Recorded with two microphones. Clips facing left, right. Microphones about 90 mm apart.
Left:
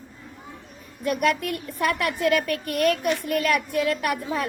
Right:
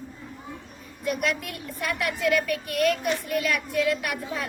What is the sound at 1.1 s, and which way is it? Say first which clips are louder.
A child's voice: left 5 dB; 50° left (ahead or behind).